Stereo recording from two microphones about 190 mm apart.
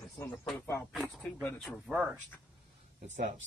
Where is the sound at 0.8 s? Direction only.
Centre (ahead or behind).